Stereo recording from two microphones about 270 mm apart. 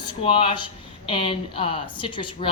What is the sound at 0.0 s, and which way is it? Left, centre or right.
Speech, centre.